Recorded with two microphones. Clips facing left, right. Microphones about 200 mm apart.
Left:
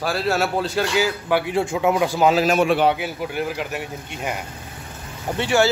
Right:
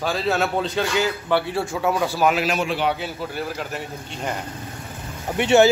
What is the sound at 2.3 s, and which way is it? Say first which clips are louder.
Speech: left 6 dB; 50° left (ahead or behind).